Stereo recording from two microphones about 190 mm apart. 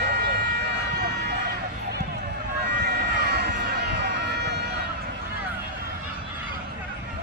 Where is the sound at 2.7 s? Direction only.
60° right (ahead or behind).